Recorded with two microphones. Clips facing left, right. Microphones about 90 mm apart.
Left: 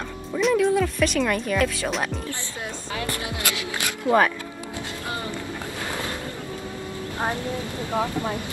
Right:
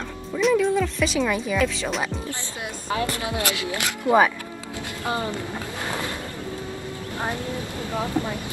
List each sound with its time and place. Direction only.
0.4 s speech: centre (ahead or behind)
2.9 s speech: 30° right (ahead or behind)
4.1 s speech: 20° left (ahead or behind)
7.9 s speech: 25° left (ahead or behind)